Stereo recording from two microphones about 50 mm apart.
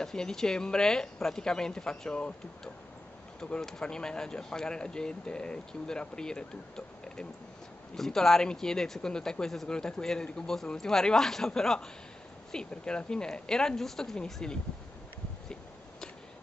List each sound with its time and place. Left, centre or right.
0.0 s speech: centre
7.9 s speech: centre